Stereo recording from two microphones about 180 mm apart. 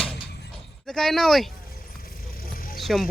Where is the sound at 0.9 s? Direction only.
Centre (ahead or behind).